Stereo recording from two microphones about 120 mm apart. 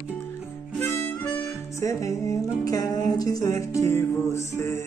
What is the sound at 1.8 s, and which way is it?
Music, 25° left (ahead or behind).